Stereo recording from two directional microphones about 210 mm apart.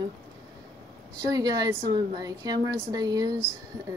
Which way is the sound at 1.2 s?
20° right (ahead or behind).